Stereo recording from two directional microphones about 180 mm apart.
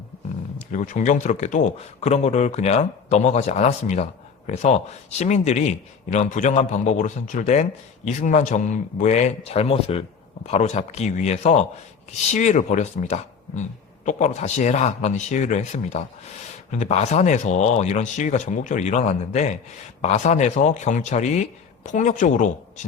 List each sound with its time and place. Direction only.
0.7 s speech: 45° left (ahead or behind)